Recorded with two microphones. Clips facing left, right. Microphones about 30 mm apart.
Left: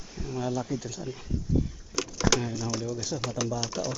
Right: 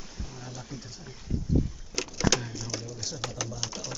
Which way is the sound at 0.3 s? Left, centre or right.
Left.